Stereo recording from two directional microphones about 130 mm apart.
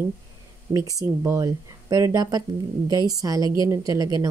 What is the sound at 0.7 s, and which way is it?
Speech, 25° right (ahead or behind).